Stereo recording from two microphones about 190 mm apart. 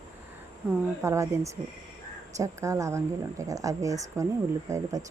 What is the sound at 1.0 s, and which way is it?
Speech, 15° right (ahead or behind).